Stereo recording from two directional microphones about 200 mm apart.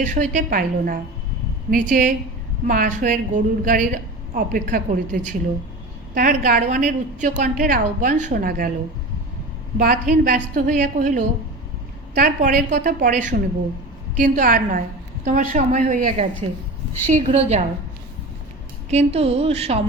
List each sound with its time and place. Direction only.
0.0 s a woman's voice: 40° right (ahead or behind)
9.7 s a woman's voice: 45° right (ahead or behind)
18.9 s a woman's voice: 30° right (ahead or behind)